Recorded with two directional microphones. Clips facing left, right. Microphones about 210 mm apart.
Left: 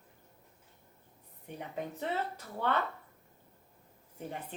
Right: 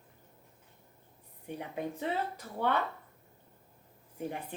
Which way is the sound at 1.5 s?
10° right (ahead or behind).